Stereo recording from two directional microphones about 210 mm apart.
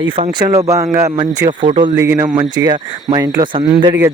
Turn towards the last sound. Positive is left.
turn(degrees=-20)  # may be behind; listen again after turning